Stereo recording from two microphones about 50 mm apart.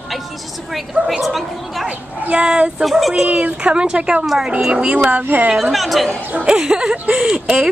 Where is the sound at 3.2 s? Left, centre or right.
Right.